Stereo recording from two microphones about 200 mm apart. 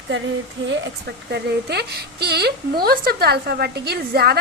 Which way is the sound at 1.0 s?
55° right (ahead or behind).